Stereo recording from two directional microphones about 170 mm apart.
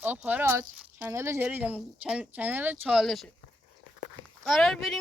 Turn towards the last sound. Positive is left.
turn(degrees=0)  # may be behind; listen again after turning